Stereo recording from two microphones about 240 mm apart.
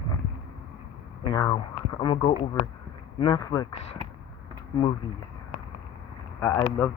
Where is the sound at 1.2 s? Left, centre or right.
Centre.